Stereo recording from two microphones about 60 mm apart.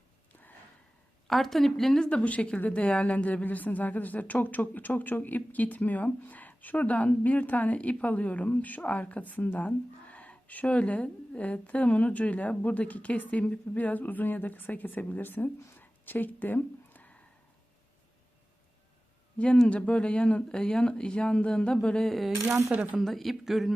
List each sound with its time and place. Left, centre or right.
1.3 s a woman's voice: centre; by 17.2 s left
19.6 s speech: centre
22.7 s speech: right
23.0 s speech: centre